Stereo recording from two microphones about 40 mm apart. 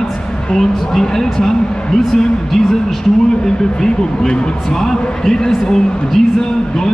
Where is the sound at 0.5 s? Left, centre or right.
Centre.